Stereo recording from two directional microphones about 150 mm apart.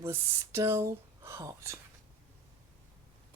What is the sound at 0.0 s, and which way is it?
Speech, 20° right (ahead or behind).